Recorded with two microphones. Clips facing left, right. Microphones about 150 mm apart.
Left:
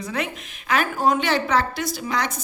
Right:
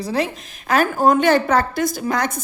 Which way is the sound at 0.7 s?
45° right (ahead or behind).